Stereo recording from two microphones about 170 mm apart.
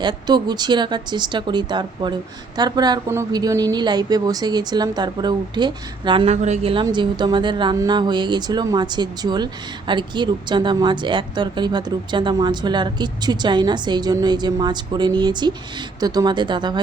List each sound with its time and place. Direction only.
0.0 s speech: 25° right (ahead or behind)
6.3 s speech: 40° right (ahead or behind); by 16.8 s 25° right (ahead or behind)